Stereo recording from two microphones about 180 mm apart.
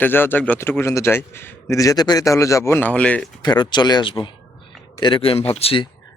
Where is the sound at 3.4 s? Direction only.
25° left (ahead or behind).